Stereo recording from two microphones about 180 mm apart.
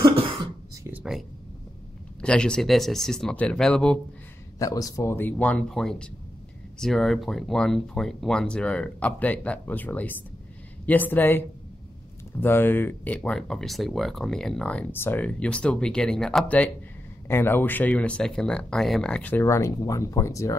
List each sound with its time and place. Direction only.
0.0 s cough: 30° right (ahead or behind)
0.8 s a sound: 5° right (ahead or behind)
2.2 s speech: 5° left (ahead or behind)
4.6 s speech: 20° left (ahead or behind)